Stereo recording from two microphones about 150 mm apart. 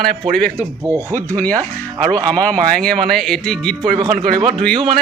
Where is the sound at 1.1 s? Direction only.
10° left (ahead or behind).